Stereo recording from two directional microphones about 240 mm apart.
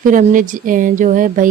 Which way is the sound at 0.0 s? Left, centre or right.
Right.